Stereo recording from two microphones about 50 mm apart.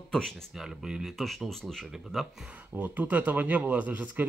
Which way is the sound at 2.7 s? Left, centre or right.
Right.